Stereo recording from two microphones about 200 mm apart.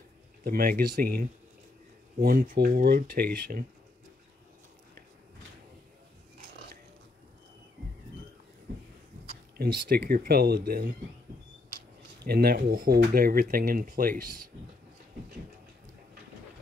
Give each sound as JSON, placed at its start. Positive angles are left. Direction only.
{"t": 0.4, "sound": "speech", "side_deg": -45}
{"t": 9.8, "sound": "speech", "side_deg": -45}
{"t": 12.3, "sound": "speech", "side_deg": -50}